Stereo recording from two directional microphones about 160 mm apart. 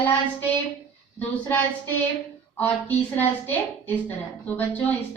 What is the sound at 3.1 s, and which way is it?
A woman's voice, 10° left (ahead or behind).